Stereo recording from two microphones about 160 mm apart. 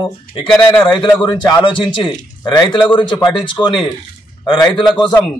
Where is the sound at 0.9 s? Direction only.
25° left (ahead or behind).